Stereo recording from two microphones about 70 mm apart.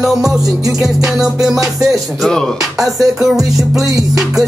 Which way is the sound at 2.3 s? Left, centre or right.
Centre.